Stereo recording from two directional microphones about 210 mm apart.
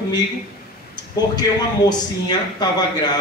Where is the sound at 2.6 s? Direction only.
20° left (ahead or behind).